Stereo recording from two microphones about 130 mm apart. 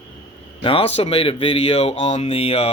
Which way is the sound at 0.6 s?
45° left (ahead or behind).